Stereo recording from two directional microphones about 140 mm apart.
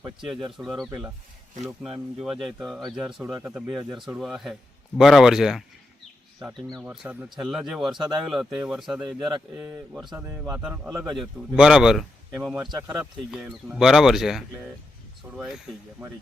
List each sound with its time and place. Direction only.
0.5 s speech: centre (ahead or behind)
2.1 s speech: 5° right (ahead or behind)
6.8 s speech: 5° right (ahead or behind)
10.2 s speech: 15° right (ahead or behind)
11.0 s speech: 5° right (ahead or behind)
12.7 s speech: 30° right (ahead or behind)
13.7 s speech: 5° right (ahead or behind)